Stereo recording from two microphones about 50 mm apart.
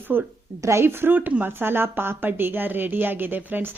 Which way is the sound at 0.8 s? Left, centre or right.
Right.